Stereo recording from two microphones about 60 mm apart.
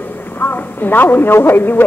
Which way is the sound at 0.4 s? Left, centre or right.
Left.